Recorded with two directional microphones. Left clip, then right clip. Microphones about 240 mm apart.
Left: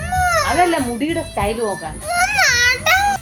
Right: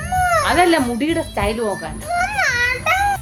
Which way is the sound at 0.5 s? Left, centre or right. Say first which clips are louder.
Right 3 dB; centre.